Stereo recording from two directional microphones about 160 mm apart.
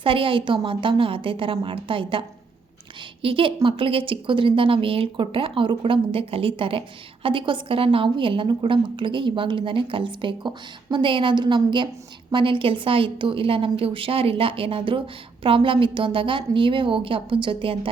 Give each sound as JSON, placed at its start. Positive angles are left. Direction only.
{"t": 0.0, "sound": "a woman's voice", "side_deg": -35}